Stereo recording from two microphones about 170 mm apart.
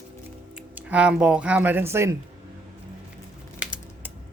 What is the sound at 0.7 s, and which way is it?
A woman's voice, 5° right (ahead or behind).